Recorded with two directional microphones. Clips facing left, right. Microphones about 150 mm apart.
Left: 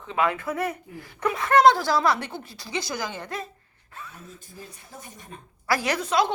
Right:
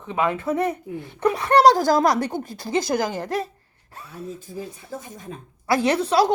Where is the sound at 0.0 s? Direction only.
15° right (ahead or behind).